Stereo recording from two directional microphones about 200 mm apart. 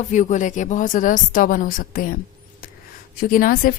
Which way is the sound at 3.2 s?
45° left (ahead or behind).